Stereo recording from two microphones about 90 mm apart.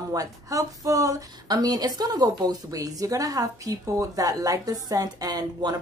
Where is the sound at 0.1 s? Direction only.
40° right (ahead or behind).